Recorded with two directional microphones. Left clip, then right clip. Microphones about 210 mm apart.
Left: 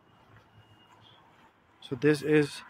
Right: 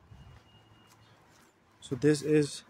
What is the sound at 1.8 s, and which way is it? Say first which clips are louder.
Speech: left 1 dB; 20° right (ahead or behind).